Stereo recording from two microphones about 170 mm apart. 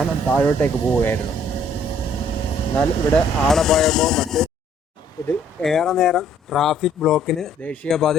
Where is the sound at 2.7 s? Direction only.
5° left (ahead or behind).